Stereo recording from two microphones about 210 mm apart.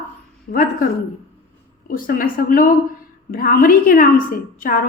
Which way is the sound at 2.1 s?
40° left (ahead or behind).